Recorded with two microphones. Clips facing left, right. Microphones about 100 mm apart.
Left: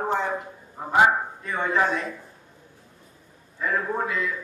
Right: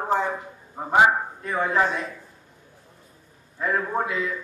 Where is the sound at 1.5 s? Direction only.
Centre (ahead or behind).